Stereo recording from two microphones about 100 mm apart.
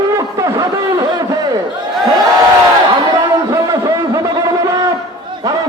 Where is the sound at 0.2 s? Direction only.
30° right (ahead or behind).